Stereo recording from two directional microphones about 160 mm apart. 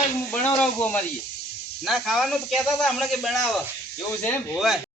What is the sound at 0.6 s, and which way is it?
Speech, 10° left (ahead or behind).